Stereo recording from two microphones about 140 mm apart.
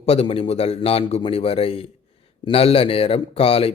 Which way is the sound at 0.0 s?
45° left (ahead or behind).